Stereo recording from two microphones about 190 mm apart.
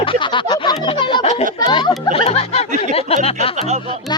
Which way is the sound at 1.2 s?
40° left (ahead or behind).